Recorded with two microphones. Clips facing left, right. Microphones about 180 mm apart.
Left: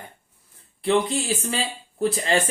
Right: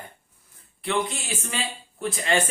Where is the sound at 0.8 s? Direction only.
35° left (ahead or behind).